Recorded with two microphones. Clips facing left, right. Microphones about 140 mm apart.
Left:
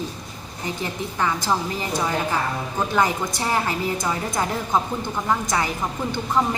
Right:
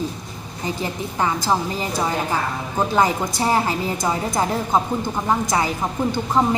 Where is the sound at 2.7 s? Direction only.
20° right (ahead or behind).